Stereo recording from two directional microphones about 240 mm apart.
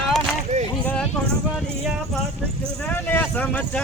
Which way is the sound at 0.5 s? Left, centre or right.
Right.